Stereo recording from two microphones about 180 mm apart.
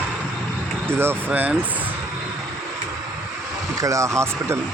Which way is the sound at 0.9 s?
15° right (ahead or behind).